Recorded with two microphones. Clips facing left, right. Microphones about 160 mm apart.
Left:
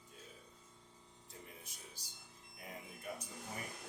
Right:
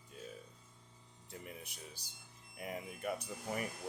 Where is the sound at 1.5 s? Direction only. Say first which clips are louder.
Right 6 dB; 70° right (ahead or behind).